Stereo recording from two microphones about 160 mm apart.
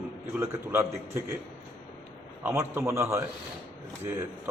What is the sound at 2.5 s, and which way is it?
Speech, 15° right (ahead or behind).